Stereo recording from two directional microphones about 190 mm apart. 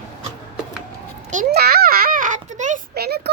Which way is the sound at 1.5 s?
55° right (ahead or behind).